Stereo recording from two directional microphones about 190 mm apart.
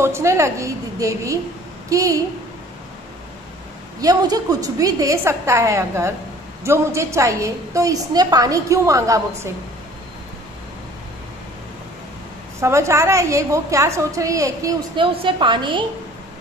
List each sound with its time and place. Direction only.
0.0 s a woman's voice: 15° right (ahead or behind)
4.0 s a woman's voice: 20° right (ahead or behind)
12.5 s a woman's voice: 15° right (ahead or behind)